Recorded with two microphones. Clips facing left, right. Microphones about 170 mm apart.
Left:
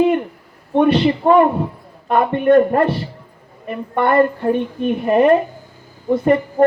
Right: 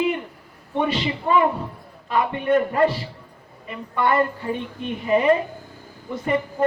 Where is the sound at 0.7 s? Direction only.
60° left (ahead or behind).